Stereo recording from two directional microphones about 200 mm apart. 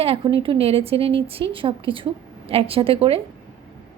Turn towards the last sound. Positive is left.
turn(degrees=-30)  # may be behind; listen again after turning